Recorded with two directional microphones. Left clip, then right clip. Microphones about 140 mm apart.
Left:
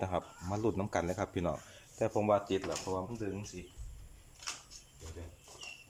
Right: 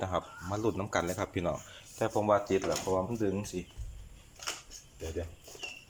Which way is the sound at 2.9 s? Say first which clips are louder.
Right 7 dB; 25° right (ahead or behind).